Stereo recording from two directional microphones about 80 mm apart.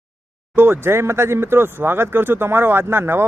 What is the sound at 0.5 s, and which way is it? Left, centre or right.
Speech, right.